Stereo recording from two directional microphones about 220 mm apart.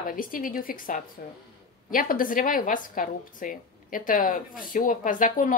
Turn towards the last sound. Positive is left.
turn(degrees=35)  # may be behind; listen again after turning